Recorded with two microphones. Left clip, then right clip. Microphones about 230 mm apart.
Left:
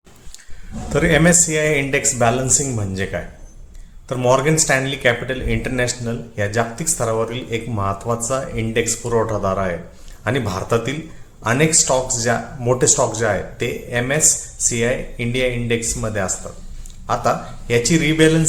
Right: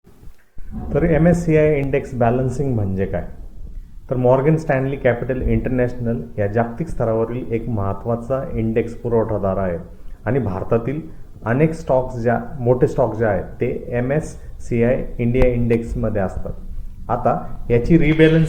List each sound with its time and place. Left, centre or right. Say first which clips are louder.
0.9 s speech: left 2 dB; left
14.2 s speech: left 8 dB; centre
14.7 s speech: right 2 dB; centre